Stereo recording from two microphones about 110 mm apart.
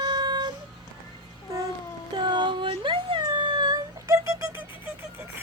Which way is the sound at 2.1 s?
45° right (ahead or behind).